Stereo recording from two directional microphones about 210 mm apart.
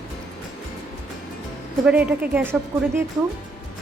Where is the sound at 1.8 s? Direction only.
5° right (ahead or behind).